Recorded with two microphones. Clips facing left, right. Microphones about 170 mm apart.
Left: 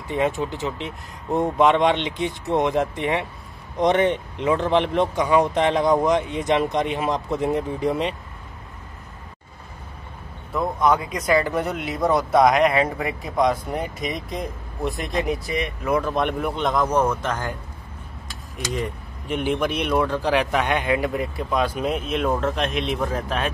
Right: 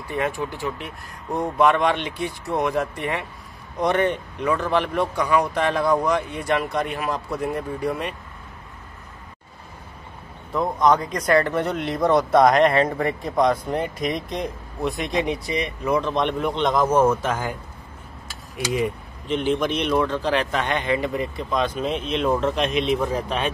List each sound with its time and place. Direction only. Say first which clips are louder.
0.1 s speech: left 3 dB; 20° left (ahead or behind)
10.5 s speech: right 1 dB; 5° left (ahead or behind)
18.6 s speech: right 4 dB; 10° right (ahead or behind)
19.2 s speech: right 1 dB; 10° left (ahead or behind)